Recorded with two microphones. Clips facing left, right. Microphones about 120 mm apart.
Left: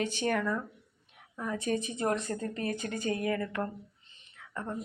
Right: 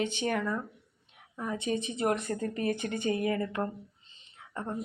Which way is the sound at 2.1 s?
30° left (ahead or behind).